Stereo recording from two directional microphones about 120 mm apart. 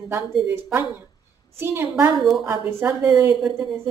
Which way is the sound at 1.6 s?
20° right (ahead or behind).